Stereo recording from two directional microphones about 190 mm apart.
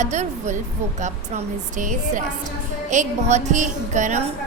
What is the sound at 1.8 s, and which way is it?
A woman's voice, 45° right (ahead or behind).